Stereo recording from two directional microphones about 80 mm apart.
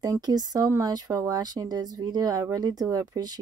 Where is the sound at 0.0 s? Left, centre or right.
Right.